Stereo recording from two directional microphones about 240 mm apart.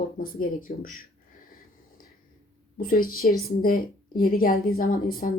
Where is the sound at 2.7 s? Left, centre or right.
Left.